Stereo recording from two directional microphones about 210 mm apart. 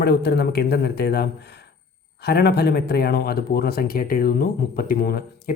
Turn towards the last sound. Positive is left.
turn(degrees=45)  # may be behind; listen again after turning